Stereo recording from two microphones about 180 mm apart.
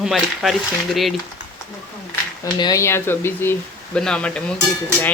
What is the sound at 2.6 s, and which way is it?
Speech, 20° left (ahead or behind).